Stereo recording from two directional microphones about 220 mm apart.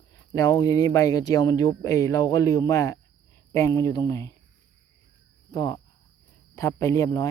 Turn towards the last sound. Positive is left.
turn(degrees=15)  # may be behind; listen again after turning